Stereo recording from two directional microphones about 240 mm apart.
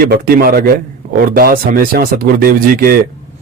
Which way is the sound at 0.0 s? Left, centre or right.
Right.